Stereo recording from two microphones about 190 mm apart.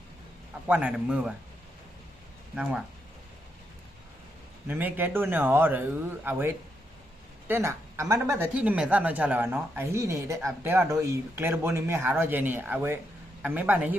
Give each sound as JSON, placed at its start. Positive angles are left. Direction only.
{"t": 0.7, "sound": "speech", "side_deg": -5}
{"t": 4.7, "sound": "speech", "side_deg": -10}
{"t": 7.4, "sound": "speech", "side_deg": -10}